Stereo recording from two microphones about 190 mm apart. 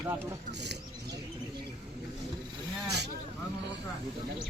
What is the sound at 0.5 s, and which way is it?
Speech, 60° right (ahead or behind).